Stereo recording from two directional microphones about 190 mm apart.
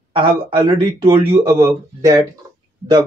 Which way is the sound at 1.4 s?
15° right (ahead or behind).